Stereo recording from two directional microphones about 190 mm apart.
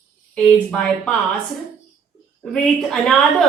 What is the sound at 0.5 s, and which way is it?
Speech, 5° left (ahead or behind).